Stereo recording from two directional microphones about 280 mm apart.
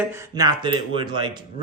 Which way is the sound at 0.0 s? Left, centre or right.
Centre.